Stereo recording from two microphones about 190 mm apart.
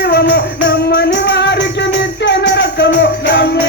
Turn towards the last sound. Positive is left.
turn(degrees=65)  # may be behind; listen again after turning